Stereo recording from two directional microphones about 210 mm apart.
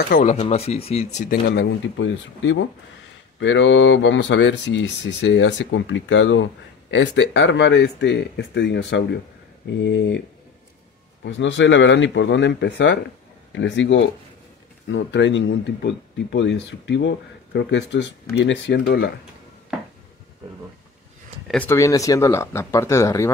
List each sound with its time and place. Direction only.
0.1 s speech: 35° left (ahead or behind)
1.5 s speech: 55° left (ahead or behind)
11.2 s speech: 60° left (ahead or behind)
21.5 s speech: 10° left (ahead or behind)